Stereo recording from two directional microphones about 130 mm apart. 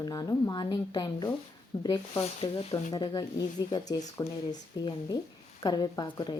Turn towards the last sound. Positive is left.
turn(degrees=35)  # may be behind; listen again after turning